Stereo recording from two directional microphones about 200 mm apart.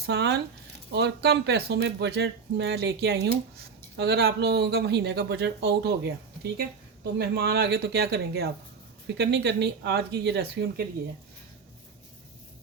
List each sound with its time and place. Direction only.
0.0 s speech: 55° right (ahead or behind)